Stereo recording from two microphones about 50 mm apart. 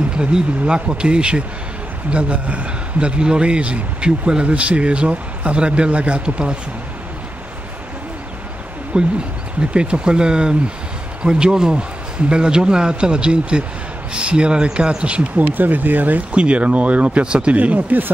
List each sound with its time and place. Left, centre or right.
0.1 s a man's voice: centre
8.9 s a man's voice: right
15.5 s a man's voice: right
17.6 s speech: right